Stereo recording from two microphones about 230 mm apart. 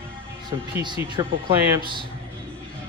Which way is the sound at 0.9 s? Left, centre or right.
Right.